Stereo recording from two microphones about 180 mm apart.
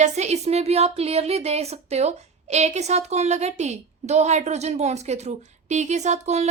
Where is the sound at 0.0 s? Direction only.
40° right (ahead or behind).